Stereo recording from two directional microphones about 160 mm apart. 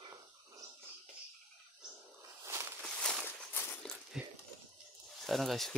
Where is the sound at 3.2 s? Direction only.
15° left (ahead or behind).